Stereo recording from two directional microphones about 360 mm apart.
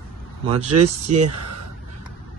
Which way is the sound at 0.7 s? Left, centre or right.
Right.